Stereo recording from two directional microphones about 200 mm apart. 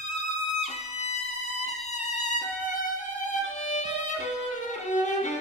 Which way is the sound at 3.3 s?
35° left (ahead or behind).